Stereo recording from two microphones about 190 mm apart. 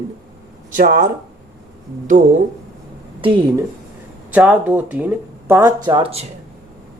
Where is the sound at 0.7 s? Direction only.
45° right (ahead or behind).